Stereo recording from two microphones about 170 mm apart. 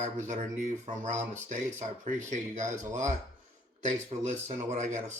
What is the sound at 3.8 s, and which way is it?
Speech, 45° right (ahead or behind).